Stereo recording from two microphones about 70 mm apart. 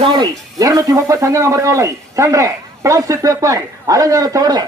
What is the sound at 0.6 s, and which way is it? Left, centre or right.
A man's voice, right.